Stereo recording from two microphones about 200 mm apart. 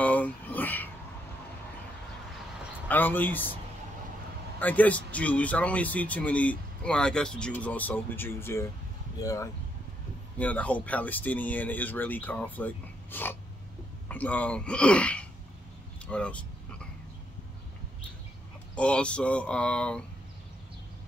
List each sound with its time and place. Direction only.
0.0 s a sound: 5° left (ahead or behind)
2.9 s speech: 10° left (ahead or behind)
4.6 s speech: 5° left (ahead or behind)
16.1 s vehicle: 5° left (ahead or behind)
18.8 s speech: 5° left (ahead or behind)